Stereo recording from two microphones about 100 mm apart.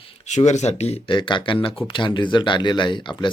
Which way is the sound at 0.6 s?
90° left.